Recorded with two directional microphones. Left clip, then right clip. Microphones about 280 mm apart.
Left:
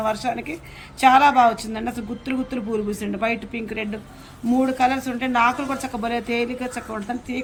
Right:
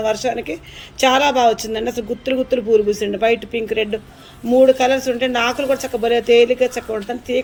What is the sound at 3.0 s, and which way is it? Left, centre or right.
A man's voice, centre.